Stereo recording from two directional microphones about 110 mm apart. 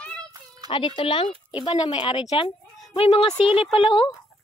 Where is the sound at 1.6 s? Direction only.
40° left (ahead or behind).